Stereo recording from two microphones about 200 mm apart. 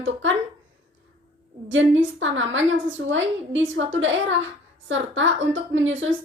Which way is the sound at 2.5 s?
70° right (ahead or behind).